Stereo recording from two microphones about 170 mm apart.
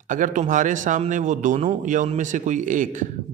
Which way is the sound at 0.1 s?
50° right (ahead or behind).